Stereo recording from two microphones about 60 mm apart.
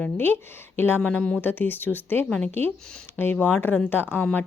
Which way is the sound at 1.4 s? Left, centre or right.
Left.